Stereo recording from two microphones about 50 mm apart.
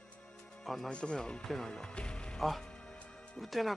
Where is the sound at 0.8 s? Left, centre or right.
Centre.